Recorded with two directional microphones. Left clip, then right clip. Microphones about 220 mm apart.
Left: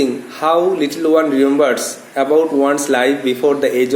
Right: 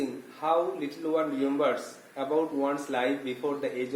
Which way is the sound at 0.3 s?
45° left (ahead or behind).